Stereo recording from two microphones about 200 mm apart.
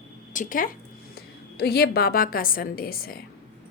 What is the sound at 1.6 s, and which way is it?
A woman's voice, 50° left (ahead or behind).